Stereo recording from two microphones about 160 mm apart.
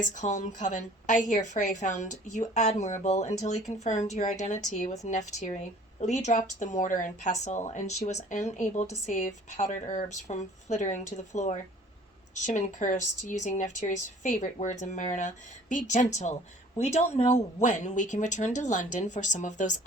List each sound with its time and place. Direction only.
0.0 s speech: 50° left (ahead or behind)